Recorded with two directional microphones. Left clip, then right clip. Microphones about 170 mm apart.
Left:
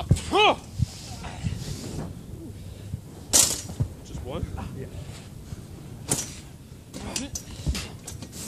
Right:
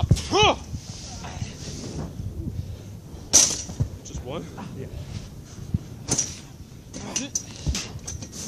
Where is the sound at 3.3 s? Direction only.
10° left (ahead or behind).